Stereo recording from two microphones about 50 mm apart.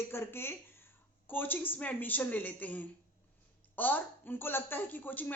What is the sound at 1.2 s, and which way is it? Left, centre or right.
A woman's voice, left.